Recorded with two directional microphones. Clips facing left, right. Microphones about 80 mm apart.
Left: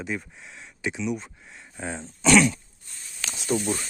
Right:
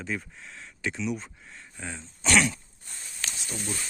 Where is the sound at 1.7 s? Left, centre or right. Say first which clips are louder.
Left 6 dB; left.